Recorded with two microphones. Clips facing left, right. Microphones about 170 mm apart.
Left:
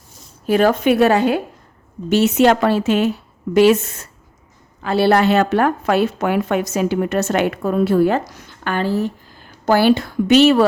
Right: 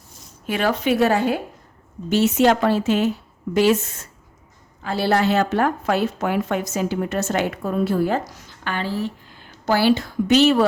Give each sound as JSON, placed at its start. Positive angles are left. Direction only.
{"t": 0.4, "sound": "a woman's voice", "side_deg": 40}
{"t": 8.3, "sound": "a woman's voice", "side_deg": 55}